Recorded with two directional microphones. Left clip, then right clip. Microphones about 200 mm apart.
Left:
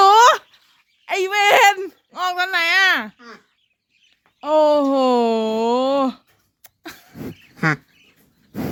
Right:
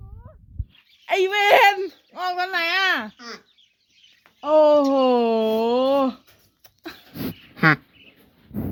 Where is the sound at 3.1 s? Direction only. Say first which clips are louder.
Right 3 dB; centre (ahead or behind).